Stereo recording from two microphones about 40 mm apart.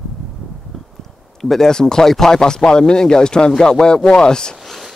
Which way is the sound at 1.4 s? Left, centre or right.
Centre.